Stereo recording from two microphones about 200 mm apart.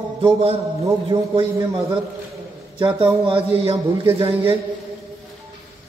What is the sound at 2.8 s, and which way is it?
A man's voice, 25° right (ahead or behind).